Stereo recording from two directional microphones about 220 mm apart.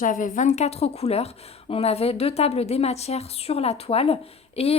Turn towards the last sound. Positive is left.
turn(degrees=25)  # may be behind; listen again after turning